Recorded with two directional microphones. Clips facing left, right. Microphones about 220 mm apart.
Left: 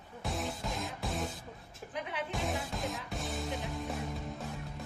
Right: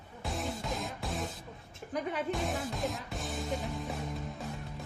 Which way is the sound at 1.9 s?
45° right (ahead or behind).